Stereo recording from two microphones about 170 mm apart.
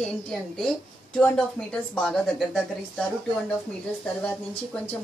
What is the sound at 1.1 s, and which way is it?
Speech, 5° left (ahead or behind).